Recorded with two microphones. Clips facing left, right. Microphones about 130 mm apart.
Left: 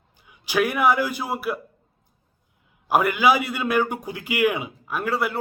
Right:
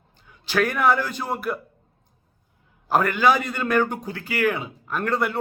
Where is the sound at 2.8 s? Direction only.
10° left (ahead or behind).